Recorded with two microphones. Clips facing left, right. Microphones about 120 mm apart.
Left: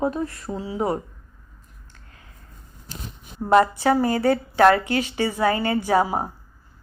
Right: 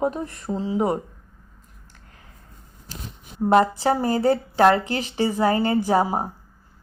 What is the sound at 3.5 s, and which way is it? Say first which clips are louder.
A woman's voice: left 1 dB; 20° right (ahead or behind).